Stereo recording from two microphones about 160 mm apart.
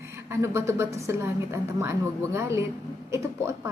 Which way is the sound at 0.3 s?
15° right (ahead or behind).